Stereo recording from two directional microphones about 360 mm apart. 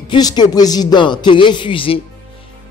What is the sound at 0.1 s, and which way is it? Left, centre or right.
Speech, centre.